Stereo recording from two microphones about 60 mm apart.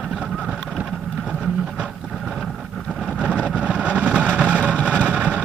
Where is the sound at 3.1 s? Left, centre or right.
Centre.